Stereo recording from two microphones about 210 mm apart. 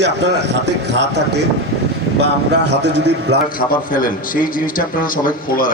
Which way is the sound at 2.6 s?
55° right (ahead or behind).